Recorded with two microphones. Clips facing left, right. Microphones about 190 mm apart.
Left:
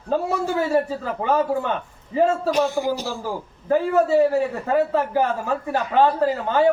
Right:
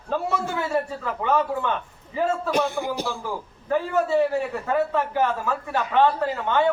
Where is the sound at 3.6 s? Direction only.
35° left (ahead or behind).